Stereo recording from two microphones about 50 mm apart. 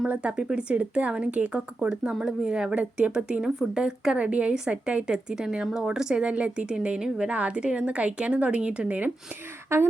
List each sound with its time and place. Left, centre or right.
0.1 s a woman's voice: right
3.4 s a woman's voice: centre
4.2 s a woman's voice: right
9.6 s speech: right